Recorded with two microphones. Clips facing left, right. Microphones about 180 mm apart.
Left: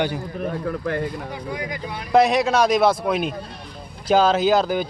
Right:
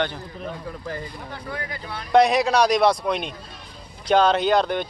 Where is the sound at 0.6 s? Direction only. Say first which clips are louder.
Left 8 dB; 60° left (ahead or behind).